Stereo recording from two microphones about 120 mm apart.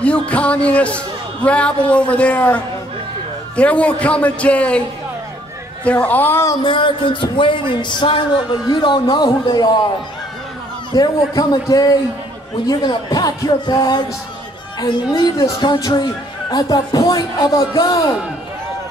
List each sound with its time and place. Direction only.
0.0 s speech: 10° left (ahead or behind)
5.9 s speech: 15° left (ahead or behind)
6.6 s speech: 45° left (ahead or behind)
10.9 s speech: 30° left (ahead or behind)